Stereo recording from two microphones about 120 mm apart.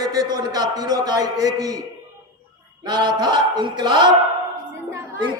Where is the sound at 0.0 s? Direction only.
35° right (ahead or behind).